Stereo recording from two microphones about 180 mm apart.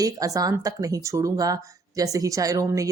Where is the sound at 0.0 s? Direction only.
20° right (ahead or behind).